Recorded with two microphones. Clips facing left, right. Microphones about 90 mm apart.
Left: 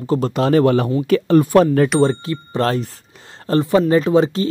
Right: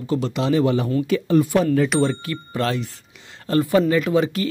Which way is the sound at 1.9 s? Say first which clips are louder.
Left 4 dB; 35° left (ahead or behind).